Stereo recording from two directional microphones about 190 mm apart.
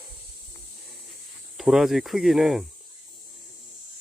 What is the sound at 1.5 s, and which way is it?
Speech, centre (ahead or behind).